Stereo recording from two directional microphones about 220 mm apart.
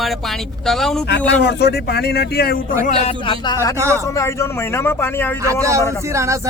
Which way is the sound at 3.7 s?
10° right (ahead or behind).